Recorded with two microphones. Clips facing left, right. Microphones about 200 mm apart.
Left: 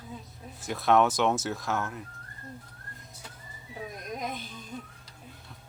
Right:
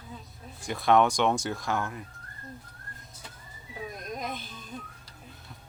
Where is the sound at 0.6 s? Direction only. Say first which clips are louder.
Right 1 dB; centre (ahead or behind).